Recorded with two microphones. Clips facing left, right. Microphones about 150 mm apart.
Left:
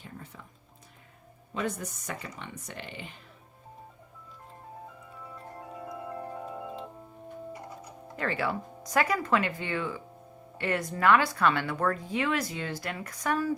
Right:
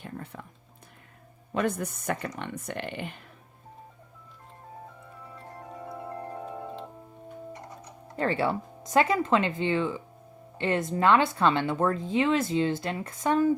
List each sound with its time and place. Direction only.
0.0 s music: 60° right (ahead or behind)
1.5 s speech: 60° right (ahead or behind)
5.8 s music: centre (ahead or behind)
8.1 s a woman's voice: 30° right (ahead or behind)